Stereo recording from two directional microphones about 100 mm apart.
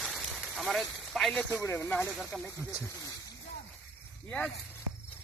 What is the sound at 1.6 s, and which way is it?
Speech, 25° left (ahead or behind).